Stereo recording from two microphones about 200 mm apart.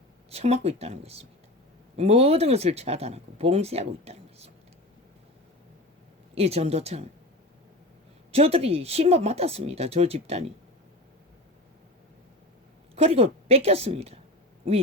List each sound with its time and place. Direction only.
0.3 s speech: 30° right (ahead or behind)
6.3 s speech: 30° right (ahead or behind)
8.3 s speech: 30° right (ahead or behind)
13.0 s speech: 30° right (ahead or behind)